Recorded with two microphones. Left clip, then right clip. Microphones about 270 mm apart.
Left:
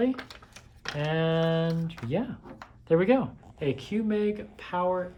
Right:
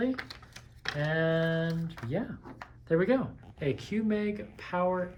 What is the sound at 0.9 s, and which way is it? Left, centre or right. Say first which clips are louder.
Speech: left 2 dB; left.